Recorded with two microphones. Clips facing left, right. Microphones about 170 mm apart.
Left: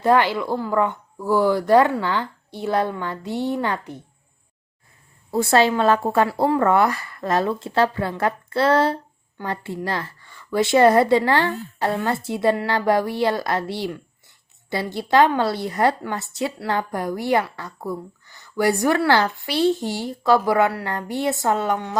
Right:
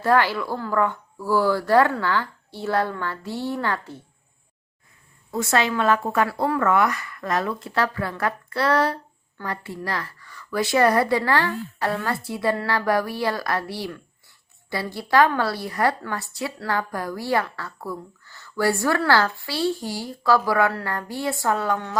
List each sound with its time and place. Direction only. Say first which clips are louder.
0.0 s speech: left 2 dB; 20° left (ahead or behind)
5.3 s a woman's voice: left 5 dB; 30° left (ahead or behind)